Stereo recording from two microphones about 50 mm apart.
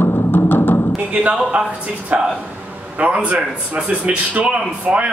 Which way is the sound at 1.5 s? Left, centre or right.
Right.